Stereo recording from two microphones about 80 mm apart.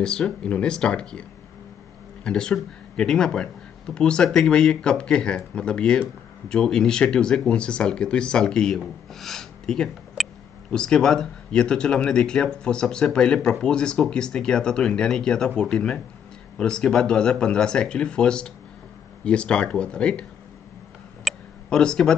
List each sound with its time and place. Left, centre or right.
0.0 s speech: centre
2.2 s speech: centre
21.3 s tick-tock: centre
21.6 s speech: centre